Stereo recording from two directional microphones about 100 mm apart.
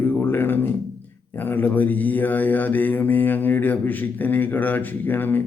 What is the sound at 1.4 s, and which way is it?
Mantra, 20° left (ahead or behind).